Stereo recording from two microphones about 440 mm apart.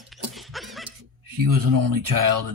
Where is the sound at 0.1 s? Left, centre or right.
Centre.